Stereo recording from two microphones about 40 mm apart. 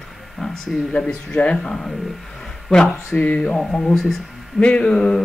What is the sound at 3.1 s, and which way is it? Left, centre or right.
Speech, left.